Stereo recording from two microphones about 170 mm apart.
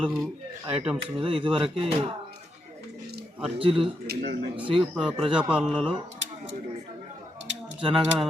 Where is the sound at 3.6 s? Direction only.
30° right (ahead or behind).